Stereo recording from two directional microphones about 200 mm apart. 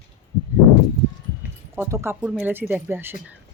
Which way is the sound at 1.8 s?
15° right (ahead or behind).